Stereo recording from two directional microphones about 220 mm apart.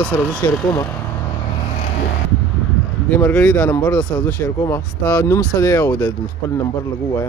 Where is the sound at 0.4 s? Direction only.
15° left (ahead or behind).